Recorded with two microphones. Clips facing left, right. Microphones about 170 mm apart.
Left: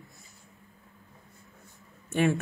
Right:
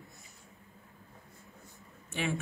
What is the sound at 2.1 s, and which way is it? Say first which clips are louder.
Speech: left 9 dB; 50° left (ahead or behind).